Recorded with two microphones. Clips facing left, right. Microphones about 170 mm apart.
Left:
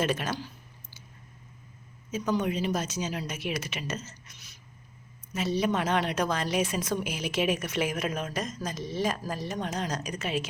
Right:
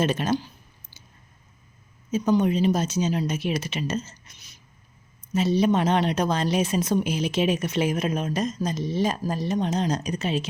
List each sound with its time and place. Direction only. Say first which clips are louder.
0.0 s speech: right 5 dB; 25° right (ahead or behind)
2.1 s speech: right 7 dB; 25° right (ahead or behind)